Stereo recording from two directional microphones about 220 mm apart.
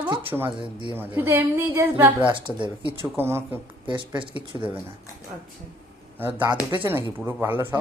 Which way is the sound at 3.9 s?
20° right (ahead or behind).